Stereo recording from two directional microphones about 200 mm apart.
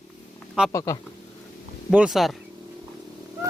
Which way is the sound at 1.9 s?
5° right (ahead or behind).